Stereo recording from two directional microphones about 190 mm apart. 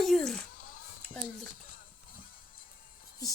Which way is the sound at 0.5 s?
45° left (ahead or behind).